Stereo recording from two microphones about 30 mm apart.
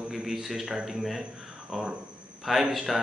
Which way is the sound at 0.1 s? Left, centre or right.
Centre.